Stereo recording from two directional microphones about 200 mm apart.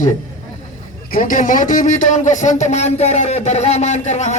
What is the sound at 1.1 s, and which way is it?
A man's voice, 45° left (ahead or behind).